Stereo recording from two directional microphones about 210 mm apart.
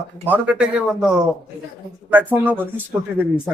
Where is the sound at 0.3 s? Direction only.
5° right (ahead or behind).